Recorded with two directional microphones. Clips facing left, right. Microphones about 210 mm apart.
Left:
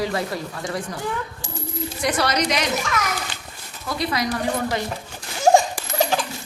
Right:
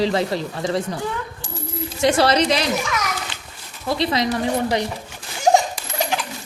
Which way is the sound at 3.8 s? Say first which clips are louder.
Right 4 dB; 25° right (ahead or behind).